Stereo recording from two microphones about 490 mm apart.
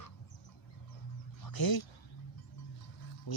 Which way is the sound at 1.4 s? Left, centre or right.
Left.